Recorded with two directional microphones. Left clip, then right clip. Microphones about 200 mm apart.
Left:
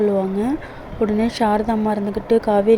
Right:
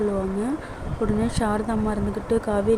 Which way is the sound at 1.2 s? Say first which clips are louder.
Left 6 dB; 10° left (ahead or behind).